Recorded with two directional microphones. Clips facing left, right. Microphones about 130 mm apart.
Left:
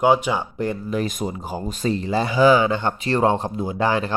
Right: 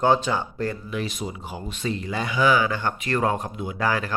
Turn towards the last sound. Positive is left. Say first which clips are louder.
# left 4 dB
turn(degrees=25)  # may be behind; listen again after turning